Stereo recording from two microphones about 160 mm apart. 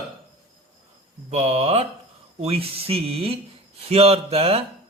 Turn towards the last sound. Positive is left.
turn(degrees=-40)  # may be behind; listen again after turning